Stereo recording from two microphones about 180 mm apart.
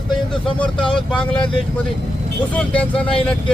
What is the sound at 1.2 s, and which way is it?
Speech, 5° left (ahead or behind).